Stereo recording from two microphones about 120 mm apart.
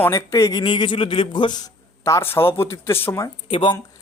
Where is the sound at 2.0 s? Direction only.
20° left (ahead or behind).